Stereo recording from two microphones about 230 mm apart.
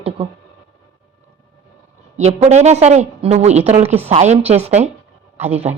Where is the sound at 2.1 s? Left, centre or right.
Right.